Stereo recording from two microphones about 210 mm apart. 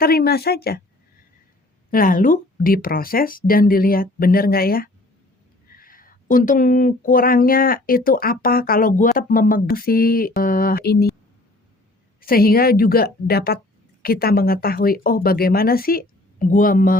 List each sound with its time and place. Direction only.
0.0 s speech: 45° left (ahead or behind)
1.9 s speech: 40° left (ahead or behind)
12.2 s speech: 45° left (ahead or behind)